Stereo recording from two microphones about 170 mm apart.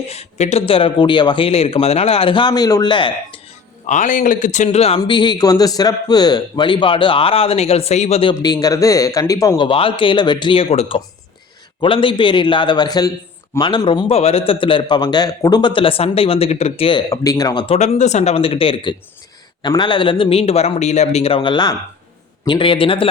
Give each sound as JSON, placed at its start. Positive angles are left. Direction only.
{"t": 0.1, "sound": "a man's voice", "side_deg": 40}
{"t": 3.8, "sound": "speech", "side_deg": 45}
{"t": 4.9, "sound": "a man's voice", "side_deg": 25}
{"t": 17.1, "sound": "speech", "side_deg": 20}
{"t": 17.7, "sound": "a man's voice", "side_deg": 45}